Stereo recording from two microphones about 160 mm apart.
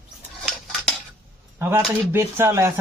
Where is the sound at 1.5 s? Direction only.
15° right (ahead or behind).